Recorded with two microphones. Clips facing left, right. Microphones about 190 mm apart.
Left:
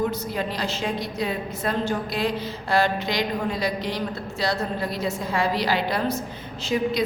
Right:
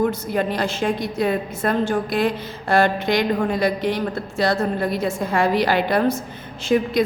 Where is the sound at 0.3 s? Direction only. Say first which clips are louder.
Right 6 dB; 50° right (ahead or behind).